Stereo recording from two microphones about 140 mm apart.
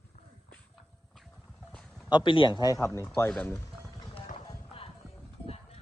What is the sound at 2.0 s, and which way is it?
Speech, 35° left (ahead or behind).